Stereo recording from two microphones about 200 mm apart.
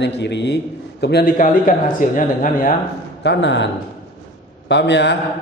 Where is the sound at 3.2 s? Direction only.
65° left (ahead or behind).